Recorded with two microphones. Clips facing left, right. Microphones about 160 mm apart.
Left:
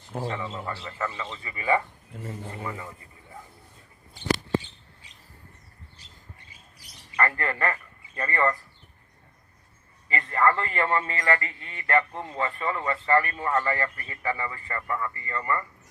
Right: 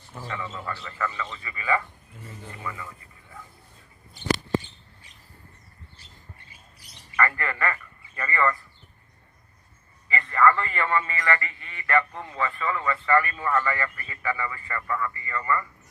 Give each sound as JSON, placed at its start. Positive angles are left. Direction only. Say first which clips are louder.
{"t": 0.3, "sound": "a man's voice", "louder": "right 2 dB", "side_deg": 30}
{"t": 7.2, "sound": "a man's voice", "louder": "even", "side_deg": 35}
{"t": 10.2, "sound": "a man's voice", "louder": "right 2 dB", "side_deg": 35}